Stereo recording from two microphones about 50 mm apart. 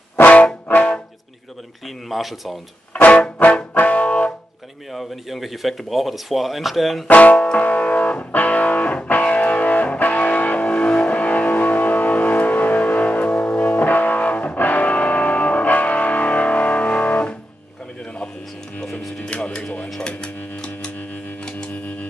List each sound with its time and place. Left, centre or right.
0.2 s music: left
2.0 s speech: centre
2.9 s music: left
4.9 s speech: centre
7.1 s speech: left
7.6 s music: left
19.2 s music: left